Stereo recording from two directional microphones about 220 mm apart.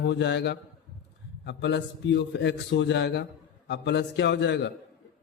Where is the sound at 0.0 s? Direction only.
50° left (ahead or behind).